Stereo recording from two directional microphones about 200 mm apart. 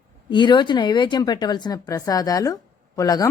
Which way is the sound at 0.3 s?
25° left (ahead or behind).